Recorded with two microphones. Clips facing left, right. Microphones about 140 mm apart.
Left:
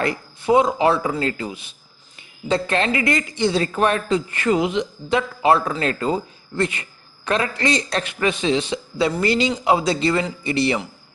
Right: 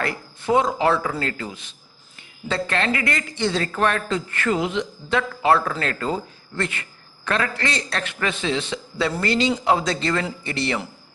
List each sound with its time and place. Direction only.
0.0 s speech: 15° left (ahead or behind)